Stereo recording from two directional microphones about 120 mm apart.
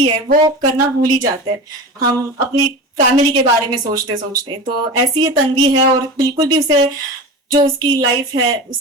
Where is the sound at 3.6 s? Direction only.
30° right (ahead or behind).